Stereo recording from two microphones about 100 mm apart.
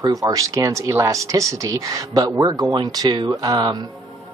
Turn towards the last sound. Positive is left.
turn(degrees=-40)  # may be behind; listen again after turning